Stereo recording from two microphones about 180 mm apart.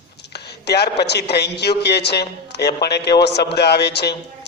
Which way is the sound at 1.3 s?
65° left (ahead or behind).